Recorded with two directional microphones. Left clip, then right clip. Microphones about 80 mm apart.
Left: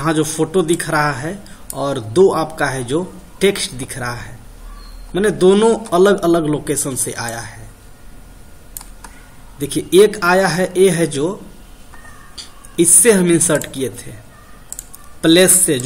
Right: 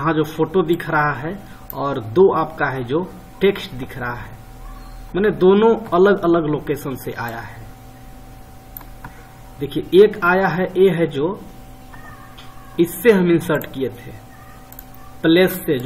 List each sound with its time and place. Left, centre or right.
0.0 s speech: left
9.6 s speech: left
13.0 s speech: left
15.2 s speech: left